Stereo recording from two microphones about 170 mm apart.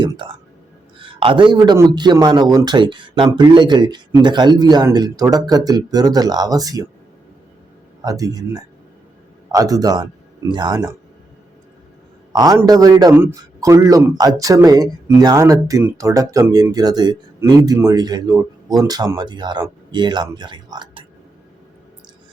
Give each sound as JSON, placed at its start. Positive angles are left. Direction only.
{"t": 0.0, "sound": "a man's voice", "side_deg": -25}
{"t": 8.0, "sound": "a man's voice", "side_deg": -20}
{"t": 12.3, "sound": "a man's voice", "side_deg": -20}